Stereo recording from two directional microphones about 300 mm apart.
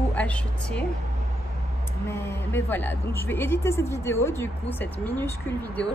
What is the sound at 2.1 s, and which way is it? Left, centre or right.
A woman's voice, centre.